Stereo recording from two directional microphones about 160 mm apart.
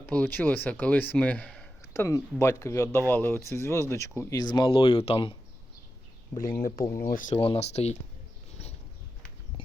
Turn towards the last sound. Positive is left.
turn(degrees=40)  # may be behind; listen again after turning